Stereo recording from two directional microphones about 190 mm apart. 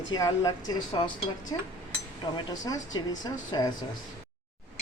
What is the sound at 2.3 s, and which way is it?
A woman's voice, 20° left (ahead or behind).